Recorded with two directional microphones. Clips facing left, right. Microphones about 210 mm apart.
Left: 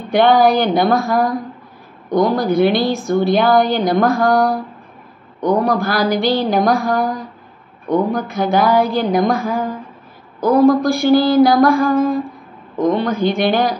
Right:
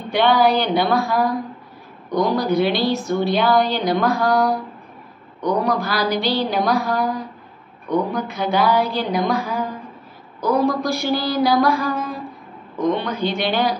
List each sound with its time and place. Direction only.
0.1 s a woman's voice: 50° left (ahead or behind)
8.1 s a woman's voice: 45° left (ahead or behind)